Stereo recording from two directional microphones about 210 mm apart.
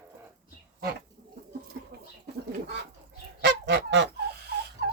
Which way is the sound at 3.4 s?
55° right (ahead or behind).